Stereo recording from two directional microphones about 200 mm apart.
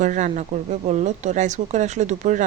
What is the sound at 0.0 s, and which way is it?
A woman's voice, 40° right (ahead or behind).